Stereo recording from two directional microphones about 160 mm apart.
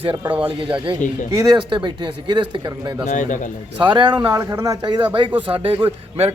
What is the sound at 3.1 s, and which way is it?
Speech, 50° left (ahead or behind).